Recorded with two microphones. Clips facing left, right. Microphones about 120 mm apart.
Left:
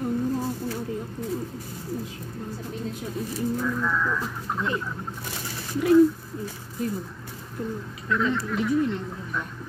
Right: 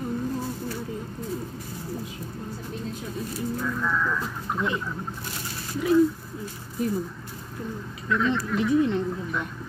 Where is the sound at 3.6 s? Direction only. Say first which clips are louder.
Left 1 dB; centre (ahead or behind).